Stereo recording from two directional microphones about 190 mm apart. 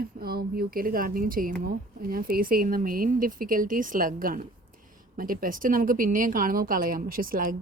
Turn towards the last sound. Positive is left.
turn(degrees=-45)  # may be behind; listen again after turning